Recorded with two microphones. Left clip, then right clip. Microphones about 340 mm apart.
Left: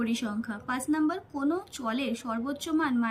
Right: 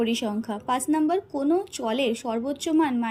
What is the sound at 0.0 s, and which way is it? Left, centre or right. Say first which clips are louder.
A woman's voice: right 6 dB; centre.